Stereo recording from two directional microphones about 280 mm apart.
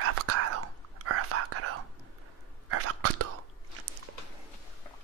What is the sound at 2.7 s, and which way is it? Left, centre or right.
Whispering, right.